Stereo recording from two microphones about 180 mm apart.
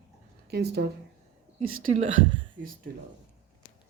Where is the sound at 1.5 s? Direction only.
30° right (ahead or behind).